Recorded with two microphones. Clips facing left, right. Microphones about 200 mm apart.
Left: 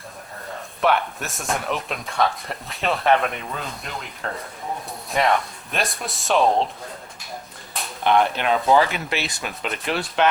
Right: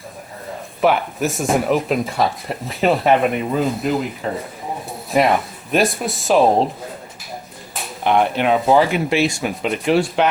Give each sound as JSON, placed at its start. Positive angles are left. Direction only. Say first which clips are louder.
{"t": 0.8, "sound": "speech", "louder": "right 4 dB", "side_deg": -5}
{"t": 6.4, "sound": "speech", "louder": "right 4 dB", "side_deg": -35}
{"t": 8.0, "sound": "speech", "louder": "right 3 dB", "side_deg": -15}